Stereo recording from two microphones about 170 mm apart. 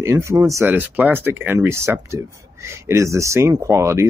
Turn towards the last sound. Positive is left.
turn(degrees=-15)  # may be behind; listen again after turning